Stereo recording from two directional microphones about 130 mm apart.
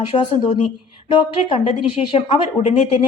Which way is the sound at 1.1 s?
45° left (ahead or behind).